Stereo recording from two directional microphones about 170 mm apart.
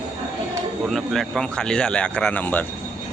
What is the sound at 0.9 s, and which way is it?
Speech, centre (ahead or behind).